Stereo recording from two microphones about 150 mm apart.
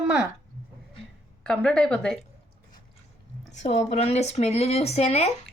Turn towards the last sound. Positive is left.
turn(degrees=45)  # may be behind; listen again after turning